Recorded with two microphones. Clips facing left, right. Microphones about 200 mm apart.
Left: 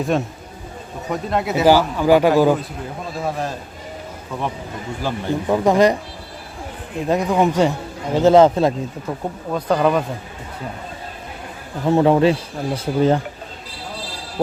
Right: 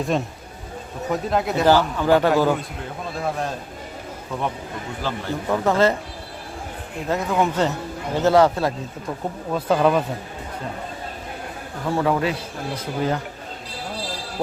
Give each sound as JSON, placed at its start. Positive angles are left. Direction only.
{"t": 0.1, "sound": "a man's voice", "side_deg": 0}
{"t": 3.2, "sound": "speech", "side_deg": 0}
{"t": 5.0, "sound": "a man's voice", "side_deg": 15}
{"t": 7.1, "sound": "a man's voice", "side_deg": 15}
{"t": 9.6, "sound": "speech", "side_deg": -5}
{"t": 11.9, "sound": "a man's voice", "side_deg": 25}